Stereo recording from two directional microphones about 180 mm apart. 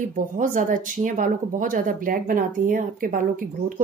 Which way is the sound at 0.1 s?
45° right (ahead or behind).